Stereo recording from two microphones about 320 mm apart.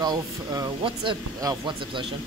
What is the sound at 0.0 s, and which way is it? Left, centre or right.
Speech, centre.